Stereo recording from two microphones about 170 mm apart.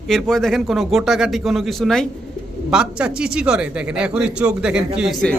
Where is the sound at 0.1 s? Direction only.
Centre (ahead or behind).